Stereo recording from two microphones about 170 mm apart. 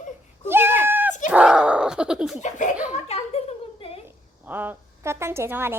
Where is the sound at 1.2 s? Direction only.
5° right (ahead or behind).